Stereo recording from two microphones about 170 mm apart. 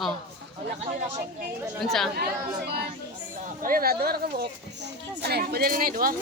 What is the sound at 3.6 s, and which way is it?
Speech, 60° right (ahead or behind).